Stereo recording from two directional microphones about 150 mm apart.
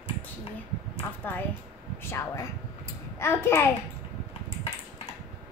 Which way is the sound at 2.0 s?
15° left (ahead or behind).